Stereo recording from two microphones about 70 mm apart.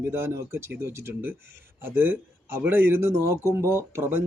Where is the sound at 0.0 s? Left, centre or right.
Right.